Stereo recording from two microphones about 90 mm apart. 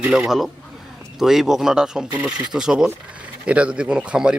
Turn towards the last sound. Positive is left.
turn(degrees=-10)  # may be behind; listen again after turning